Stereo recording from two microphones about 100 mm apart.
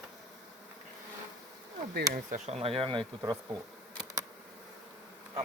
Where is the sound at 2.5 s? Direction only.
85° right; by 3.0 s 65° right (ahead or behind).